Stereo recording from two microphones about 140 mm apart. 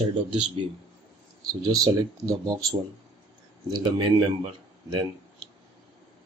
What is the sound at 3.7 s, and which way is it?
Speech, 30° right (ahead or behind).